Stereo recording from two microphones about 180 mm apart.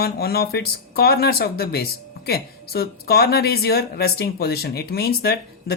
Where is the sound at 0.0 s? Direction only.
60° left (ahead or behind).